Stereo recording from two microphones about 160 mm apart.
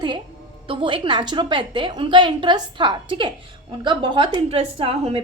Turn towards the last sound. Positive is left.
turn(degrees=-40)  # may be behind; listen again after turning